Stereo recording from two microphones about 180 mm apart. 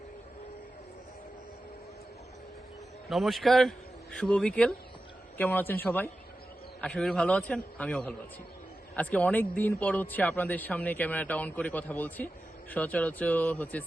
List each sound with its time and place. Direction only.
3.1 s a man's voice: centre (ahead or behind)